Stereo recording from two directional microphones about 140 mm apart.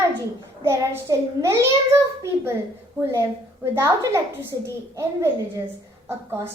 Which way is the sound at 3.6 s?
20° right (ahead or behind).